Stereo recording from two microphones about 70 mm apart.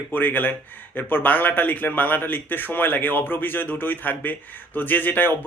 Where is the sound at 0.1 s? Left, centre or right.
Left.